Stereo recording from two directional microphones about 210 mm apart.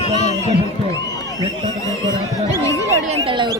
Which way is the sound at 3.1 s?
25° right (ahead or behind).